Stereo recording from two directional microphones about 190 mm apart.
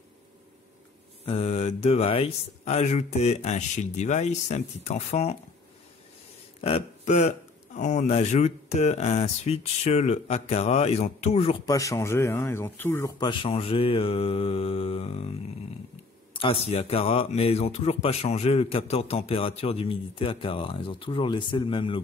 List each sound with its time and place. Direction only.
1.2 s speech: 30° left (ahead or behind)
6.6 s speech: 35° left (ahead or behind)
11.6 s speech: 15° left (ahead or behind)
13.3 s speech: 30° left (ahead or behind)
16.3 s speech: 30° left (ahead or behind)